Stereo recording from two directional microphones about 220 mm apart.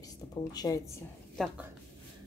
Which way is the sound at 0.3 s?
20° left (ahead or behind).